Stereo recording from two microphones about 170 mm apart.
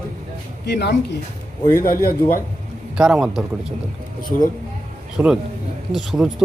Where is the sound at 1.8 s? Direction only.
60° left (ahead or behind).